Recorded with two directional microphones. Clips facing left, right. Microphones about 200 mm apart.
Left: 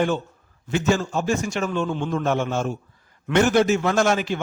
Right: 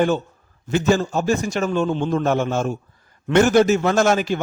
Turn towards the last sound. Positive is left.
turn(degrees=-40)  # may be behind; listen again after turning